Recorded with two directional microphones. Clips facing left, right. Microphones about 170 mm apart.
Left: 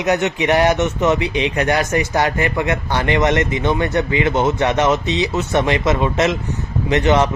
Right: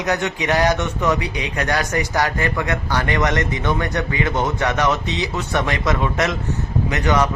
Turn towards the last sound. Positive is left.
turn(degrees=25)  # may be behind; listen again after turning